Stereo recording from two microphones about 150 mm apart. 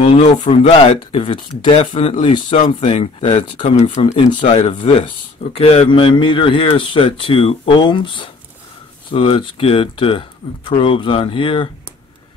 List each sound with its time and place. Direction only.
0.0 s speech: 40° left (ahead or behind)
2.8 s speech: 45° left (ahead or behind)